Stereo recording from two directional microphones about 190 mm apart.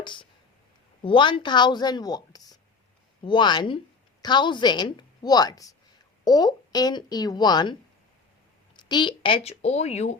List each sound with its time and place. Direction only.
0.0 s a woman's voice: 25° left (ahead or behind)